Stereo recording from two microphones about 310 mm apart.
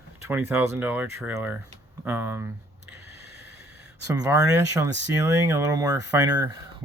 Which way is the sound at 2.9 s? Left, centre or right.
Centre.